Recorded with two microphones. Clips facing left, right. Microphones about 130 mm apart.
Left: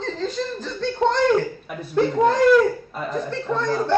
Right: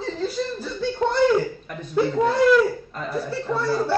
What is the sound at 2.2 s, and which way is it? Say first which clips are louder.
A man's voice: left 2 dB; 5° right (ahead or behind).